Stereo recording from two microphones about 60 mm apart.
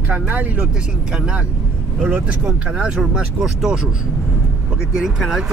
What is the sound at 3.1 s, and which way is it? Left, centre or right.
Speech, centre.